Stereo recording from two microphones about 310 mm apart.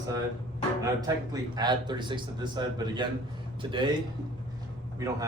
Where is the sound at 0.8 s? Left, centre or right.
Centre.